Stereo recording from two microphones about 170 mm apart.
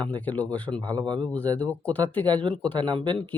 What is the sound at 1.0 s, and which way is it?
Speech, 25° right (ahead or behind).